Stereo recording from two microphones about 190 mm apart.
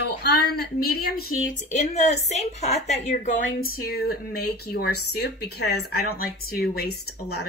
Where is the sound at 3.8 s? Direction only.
50° left (ahead or behind).